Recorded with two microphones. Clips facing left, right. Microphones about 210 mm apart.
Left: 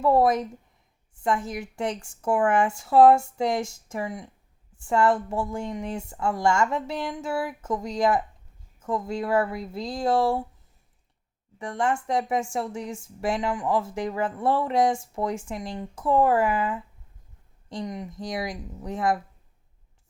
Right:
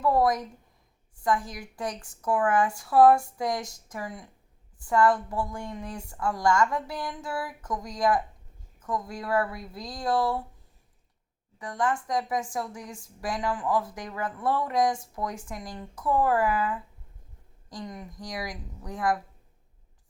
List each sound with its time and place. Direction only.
0.0 s speech: 25° left (ahead or behind)
11.6 s speech: 25° left (ahead or behind)